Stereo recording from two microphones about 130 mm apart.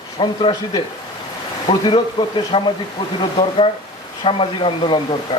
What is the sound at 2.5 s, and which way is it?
Speech, 45° left (ahead or behind).